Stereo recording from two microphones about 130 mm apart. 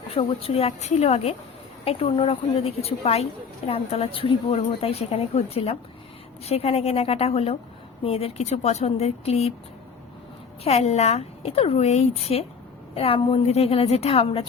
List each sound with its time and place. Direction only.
0.1 s a woman's voice: 45° left (ahead or behind)
10.6 s a woman's voice: 50° left (ahead or behind)